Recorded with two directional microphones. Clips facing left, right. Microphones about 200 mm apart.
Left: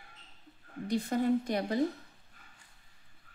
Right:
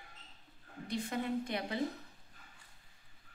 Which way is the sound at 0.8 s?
40° left (ahead or behind).